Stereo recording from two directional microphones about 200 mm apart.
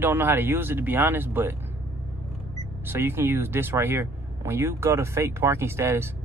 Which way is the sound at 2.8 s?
10° right (ahead or behind).